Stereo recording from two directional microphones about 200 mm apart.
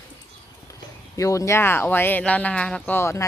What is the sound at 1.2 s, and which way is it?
Speech, 15° left (ahead or behind).